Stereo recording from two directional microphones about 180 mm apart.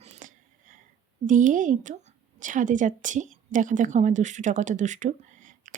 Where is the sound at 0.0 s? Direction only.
40° right (ahead or behind).